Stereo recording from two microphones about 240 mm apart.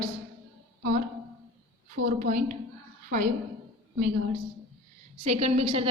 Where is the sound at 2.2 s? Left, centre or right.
Right.